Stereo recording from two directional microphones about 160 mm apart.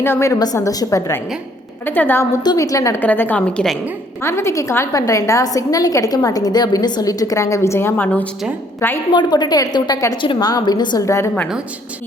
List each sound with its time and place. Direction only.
0.0 s a woman's voice: 15° left (ahead or behind)
2.4 s a woman's voice: 25° left (ahead or behind)
9.1 s a woman's voice: 25° left (ahead or behind)